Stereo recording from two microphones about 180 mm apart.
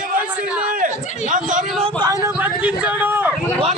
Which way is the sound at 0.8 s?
45° right (ahead or behind).